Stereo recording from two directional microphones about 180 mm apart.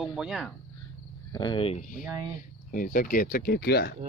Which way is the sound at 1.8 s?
50° left (ahead or behind).